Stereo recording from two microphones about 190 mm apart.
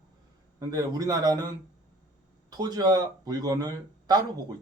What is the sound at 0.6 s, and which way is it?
Speech, 20° right (ahead or behind).